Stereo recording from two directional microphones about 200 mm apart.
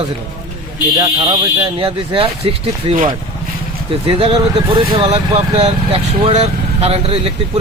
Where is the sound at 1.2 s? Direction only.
25° right (ahead or behind).